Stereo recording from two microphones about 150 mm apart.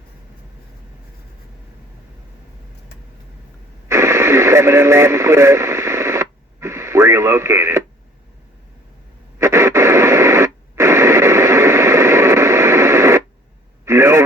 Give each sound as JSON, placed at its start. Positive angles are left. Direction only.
{"t": 3.8, "sound": "radio", "side_deg": -20}
{"t": 9.4, "sound": "radio", "side_deg": -20}